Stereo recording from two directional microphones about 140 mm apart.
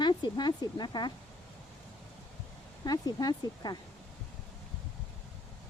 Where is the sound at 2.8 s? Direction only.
30° left (ahead or behind).